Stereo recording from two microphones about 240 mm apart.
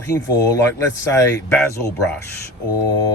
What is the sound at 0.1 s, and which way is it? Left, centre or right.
Speech, centre.